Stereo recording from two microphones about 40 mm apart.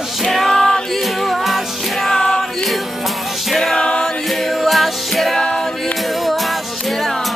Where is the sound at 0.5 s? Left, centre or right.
Centre.